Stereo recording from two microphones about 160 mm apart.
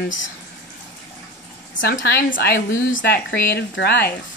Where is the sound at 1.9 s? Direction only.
75° left (ahead or behind).